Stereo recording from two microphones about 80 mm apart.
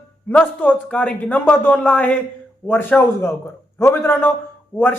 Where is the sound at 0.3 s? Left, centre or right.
Left.